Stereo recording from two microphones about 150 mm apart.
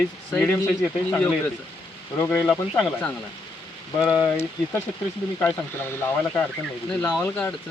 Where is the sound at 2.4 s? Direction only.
5° left (ahead or behind).